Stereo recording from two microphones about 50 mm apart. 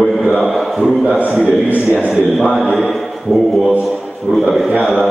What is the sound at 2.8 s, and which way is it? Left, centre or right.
A man's voice, centre.